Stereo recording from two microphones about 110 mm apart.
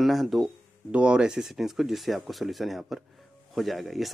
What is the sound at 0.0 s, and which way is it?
Speech, centre (ahead or behind).